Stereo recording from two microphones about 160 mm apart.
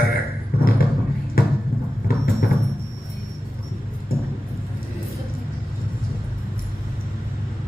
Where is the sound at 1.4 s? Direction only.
65° left (ahead or behind).